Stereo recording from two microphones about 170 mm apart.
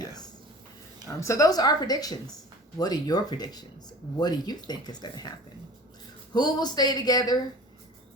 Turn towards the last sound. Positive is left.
turn(degrees=25)  # may be behind; listen again after turning